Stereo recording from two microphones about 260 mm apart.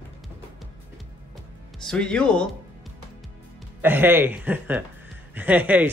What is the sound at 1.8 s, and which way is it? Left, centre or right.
Speech, centre.